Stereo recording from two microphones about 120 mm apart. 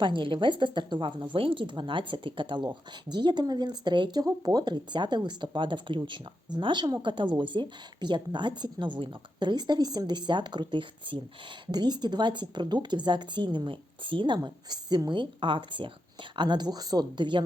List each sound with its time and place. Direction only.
0.0 s a woman's voice: 45° right (ahead or behind)